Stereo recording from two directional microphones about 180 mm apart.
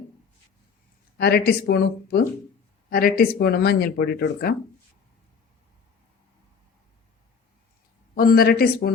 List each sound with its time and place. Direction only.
1.2 s speech: 60° left (ahead or behind)
8.1 s speech: 55° left (ahead or behind)